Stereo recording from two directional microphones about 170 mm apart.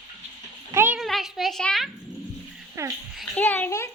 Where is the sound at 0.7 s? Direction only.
15° right (ahead or behind).